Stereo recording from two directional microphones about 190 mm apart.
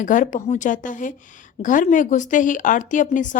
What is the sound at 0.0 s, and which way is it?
A woman's voice, 45° left (ahead or behind).